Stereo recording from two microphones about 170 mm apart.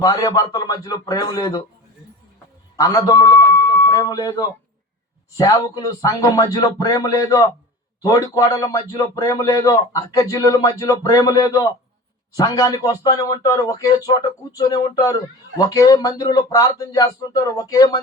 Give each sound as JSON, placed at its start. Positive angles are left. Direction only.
{"t": 0.0, "sound": "speech", "side_deg": 20}
{"t": 2.7, "sound": "a man's voice", "side_deg": 20}